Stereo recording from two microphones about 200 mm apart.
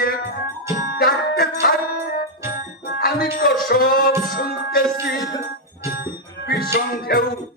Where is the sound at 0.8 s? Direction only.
50° left (ahead or behind).